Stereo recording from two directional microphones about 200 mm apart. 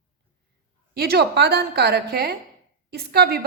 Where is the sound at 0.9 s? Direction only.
50° right (ahead or behind).